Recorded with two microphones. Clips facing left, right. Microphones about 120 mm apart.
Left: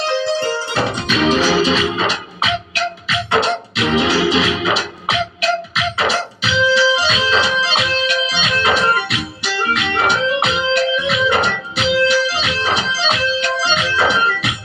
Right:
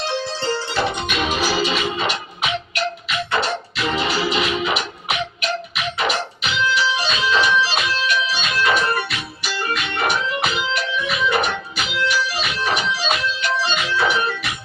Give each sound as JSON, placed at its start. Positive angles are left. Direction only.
{"t": 0.0, "sound": "music", "side_deg": 65}